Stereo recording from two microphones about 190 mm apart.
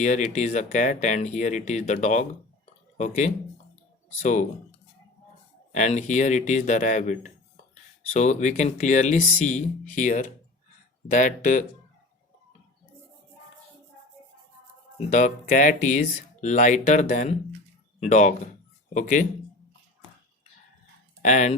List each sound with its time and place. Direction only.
0.0 s speech: 40° left (ahead or behind)
5.7 s speech: 40° left (ahead or behind)
14.9 s speech: 40° left (ahead or behind)
21.2 s speech: 40° left (ahead or behind)